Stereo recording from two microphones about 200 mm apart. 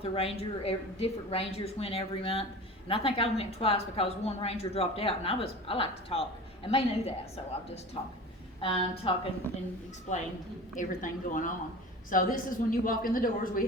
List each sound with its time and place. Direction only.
0.0 s a woman's voice: 30° left (ahead or behind)
10.1 s a woman's voice: 40° left (ahead or behind)